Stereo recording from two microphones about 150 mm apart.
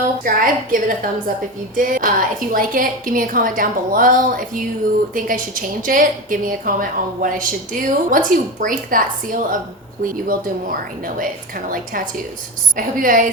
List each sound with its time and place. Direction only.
0.3 s a woman's voice: 65° right (ahead or behind)